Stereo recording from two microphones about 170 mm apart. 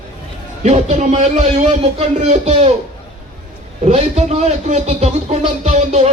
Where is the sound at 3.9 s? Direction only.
40° right (ahead or behind).